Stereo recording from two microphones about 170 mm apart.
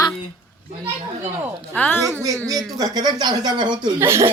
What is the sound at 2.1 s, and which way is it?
Speech, 20° right (ahead or behind).